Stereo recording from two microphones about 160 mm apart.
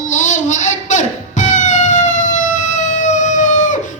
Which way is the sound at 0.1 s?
50° left (ahead or behind).